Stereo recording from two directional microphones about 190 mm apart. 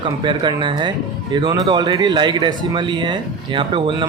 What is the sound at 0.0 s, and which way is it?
Speech, 25° right (ahead or behind).